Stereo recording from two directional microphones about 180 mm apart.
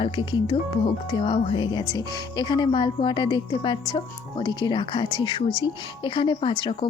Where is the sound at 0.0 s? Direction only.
25° left (ahead or behind).